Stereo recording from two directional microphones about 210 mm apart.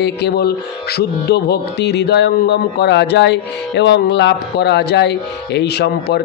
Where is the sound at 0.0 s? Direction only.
50° left (ahead or behind).